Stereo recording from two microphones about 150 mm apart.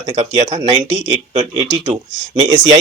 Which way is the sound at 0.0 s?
50° right (ahead or behind).